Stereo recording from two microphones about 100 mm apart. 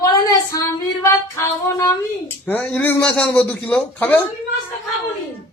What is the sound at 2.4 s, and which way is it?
A man's voice, 15° left (ahead or behind).